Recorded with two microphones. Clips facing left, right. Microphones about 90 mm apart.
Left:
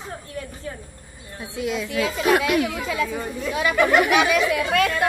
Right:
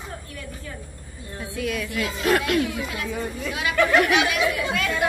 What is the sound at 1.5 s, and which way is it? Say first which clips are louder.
A woman's voice: left 3 dB; 20° left (ahead or behind).